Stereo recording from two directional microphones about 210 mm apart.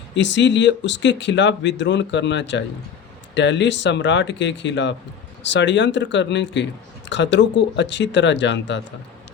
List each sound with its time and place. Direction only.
0.1 s speech: 60° left (ahead or behind)